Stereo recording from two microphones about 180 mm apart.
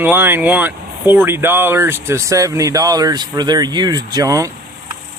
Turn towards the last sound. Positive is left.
turn(degrees=-20)  # may be behind; listen again after turning